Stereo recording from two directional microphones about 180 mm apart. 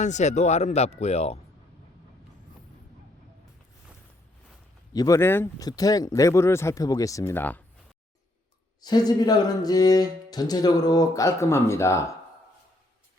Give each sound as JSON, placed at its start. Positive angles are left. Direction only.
{"t": 0.0, "sound": "speech", "side_deg": 40}
{"t": 4.9, "sound": "speech", "side_deg": 20}
{"t": 8.8, "sound": "speech", "side_deg": 20}